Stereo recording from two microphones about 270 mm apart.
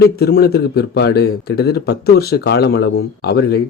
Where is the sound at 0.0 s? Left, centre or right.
Left.